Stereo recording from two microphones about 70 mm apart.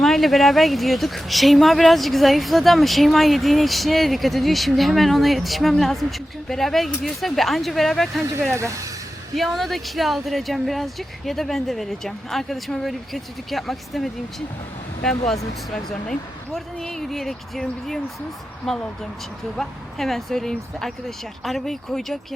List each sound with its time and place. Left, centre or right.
0.0 s speech: centre
8.5 s speech: right
9.3 s speech: centre